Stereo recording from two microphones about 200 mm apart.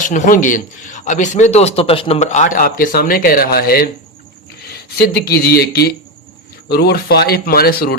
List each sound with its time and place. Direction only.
0.0 s a man's voice: 40° left (ahead or behind)